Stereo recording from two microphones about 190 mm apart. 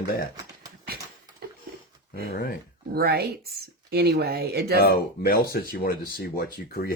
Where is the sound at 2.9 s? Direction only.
55° right (ahead or behind).